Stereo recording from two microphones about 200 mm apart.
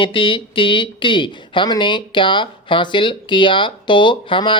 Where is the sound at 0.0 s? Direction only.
25° left (ahead or behind).